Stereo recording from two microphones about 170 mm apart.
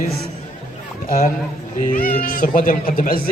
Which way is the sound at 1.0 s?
55° left (ahead or behind).